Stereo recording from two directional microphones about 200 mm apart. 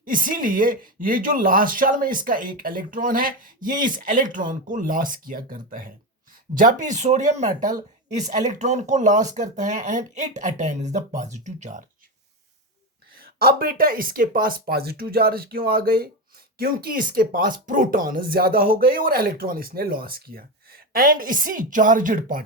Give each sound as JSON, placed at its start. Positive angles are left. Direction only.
{"t": 0.0, "sound": "speech", "side_deg": -45}
{"t": 13.1, "sound": "speech", "side_deg": -50}